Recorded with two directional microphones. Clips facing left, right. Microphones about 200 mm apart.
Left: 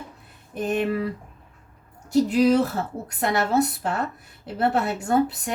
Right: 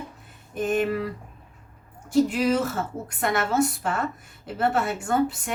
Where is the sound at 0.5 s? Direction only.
35° left (ahead or behind).